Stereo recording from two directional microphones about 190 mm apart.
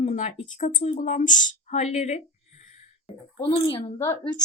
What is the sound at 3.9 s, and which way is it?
Speech, 10° left (ahead or behind).